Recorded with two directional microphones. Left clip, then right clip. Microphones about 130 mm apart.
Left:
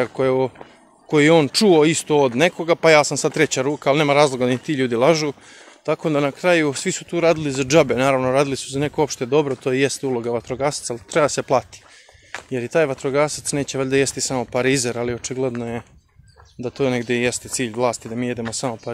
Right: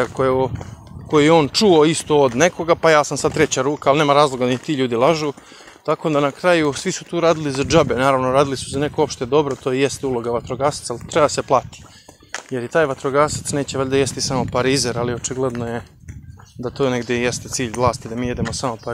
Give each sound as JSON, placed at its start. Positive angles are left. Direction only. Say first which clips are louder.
{"t": 0.0, "sound": "speech", "louder": "right 1 dB", "side_deg": 25}
{"t": 16.6, "sound": "speech", "louder": "right 1 dB", "side_deg": 20}